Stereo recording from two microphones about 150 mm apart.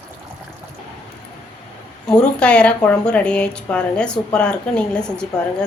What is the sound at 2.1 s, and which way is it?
Speech, 5° left (ahead or behind).